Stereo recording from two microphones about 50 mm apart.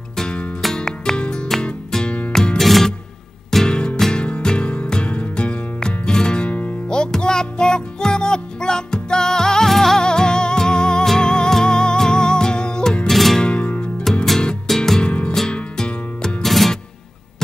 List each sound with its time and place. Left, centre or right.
0.2 s music: centre
3.6 s music: centre
10.0 s music: centre
13.4 s music: left
14.1 s music: centre